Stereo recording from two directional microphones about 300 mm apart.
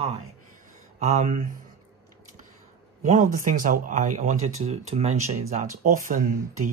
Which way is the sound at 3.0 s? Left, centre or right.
Right.